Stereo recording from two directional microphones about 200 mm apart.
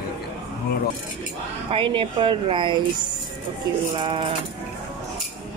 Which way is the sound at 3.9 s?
25° right (ahead or behind).